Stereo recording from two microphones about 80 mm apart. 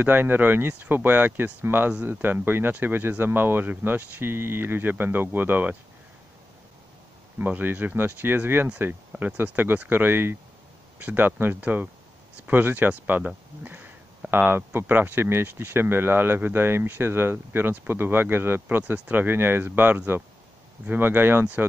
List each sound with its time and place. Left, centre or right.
0.0 s speech: right
7.3 s speech: right